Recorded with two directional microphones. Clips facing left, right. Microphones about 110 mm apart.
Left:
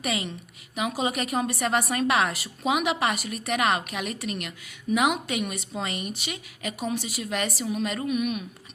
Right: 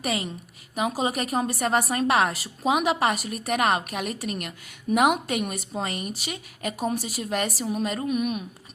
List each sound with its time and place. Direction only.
0.0 s a woman's voice: 40° right (ahead or behind)